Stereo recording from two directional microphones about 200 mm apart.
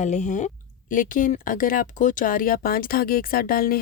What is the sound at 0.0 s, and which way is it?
Speech, 35° left (ahead or behind).